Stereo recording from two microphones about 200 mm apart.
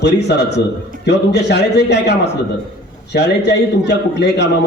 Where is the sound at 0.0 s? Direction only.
55° left (ahead or behind).